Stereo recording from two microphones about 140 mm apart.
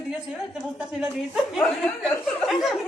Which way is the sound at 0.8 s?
5° right (ahead or behind).